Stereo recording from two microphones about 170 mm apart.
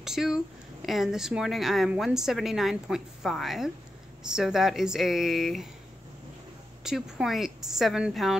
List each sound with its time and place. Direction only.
0.0 s a woman's voice: centre (ahead or behind)
6.8 s a woman's voice: 5° right (ahead or behind)